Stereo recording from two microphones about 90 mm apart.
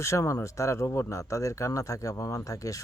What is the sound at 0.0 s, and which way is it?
Speech, 35° left (ahead or behind).